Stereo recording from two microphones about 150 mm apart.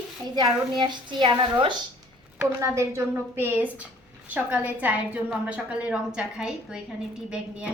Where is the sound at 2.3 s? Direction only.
20° right (ahead or behind).